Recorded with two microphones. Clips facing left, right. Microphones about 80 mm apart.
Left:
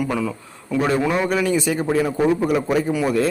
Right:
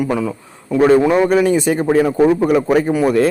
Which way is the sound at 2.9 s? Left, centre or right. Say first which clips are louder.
Right 5 dB; right.